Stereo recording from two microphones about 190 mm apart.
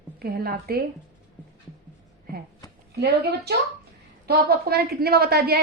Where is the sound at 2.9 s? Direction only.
60° right (ahead or behind).